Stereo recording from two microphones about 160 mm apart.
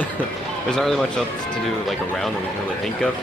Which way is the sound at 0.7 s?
Centre (ahead or behind).